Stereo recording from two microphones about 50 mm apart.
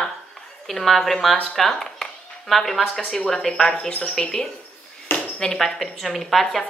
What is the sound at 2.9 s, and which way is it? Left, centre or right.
Speech, centre.